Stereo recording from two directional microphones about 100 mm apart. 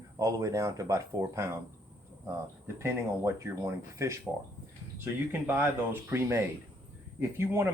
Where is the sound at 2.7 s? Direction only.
25° right (ahead or behind).